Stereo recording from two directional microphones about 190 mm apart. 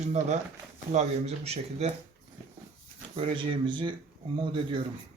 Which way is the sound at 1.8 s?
35° right (ahead or behind).